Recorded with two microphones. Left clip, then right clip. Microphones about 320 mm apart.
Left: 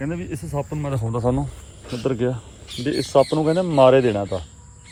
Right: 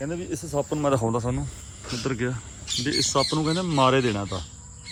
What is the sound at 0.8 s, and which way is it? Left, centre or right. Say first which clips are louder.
Speech: right 5 dB; right.